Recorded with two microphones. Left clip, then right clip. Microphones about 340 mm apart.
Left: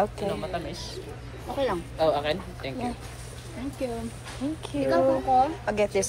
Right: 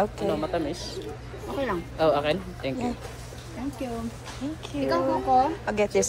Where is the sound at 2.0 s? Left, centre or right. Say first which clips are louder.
Right 2 dB; right.